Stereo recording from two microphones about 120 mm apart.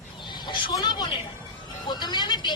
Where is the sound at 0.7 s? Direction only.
35° left (ahead or behind).